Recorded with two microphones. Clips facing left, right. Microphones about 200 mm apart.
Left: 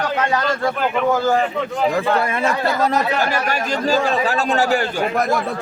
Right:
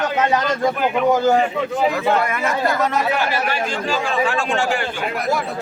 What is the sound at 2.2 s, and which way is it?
Speech, 30° left (ahead or behind).